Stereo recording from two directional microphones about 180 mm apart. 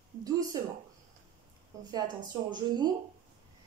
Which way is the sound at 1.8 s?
20° right (ahead or behind).